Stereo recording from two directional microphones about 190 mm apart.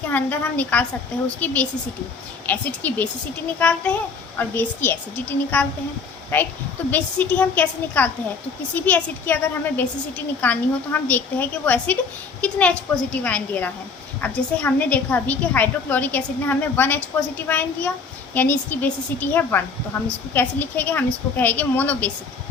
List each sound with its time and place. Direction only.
0.1 s a woman's voice: 10° left (ahead or behind)